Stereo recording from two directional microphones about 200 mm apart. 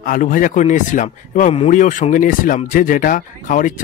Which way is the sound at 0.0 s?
45° left (ahead or behind).